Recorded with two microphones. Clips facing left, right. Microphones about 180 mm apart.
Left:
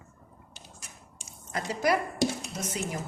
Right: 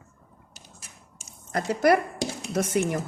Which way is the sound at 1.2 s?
50° right (ahead or behind).